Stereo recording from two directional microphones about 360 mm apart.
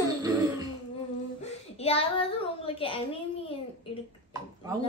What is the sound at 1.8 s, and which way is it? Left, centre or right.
Speech, centre.